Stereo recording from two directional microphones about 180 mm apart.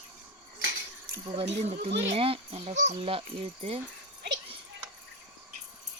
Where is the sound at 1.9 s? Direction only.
75° right (ahead or behind).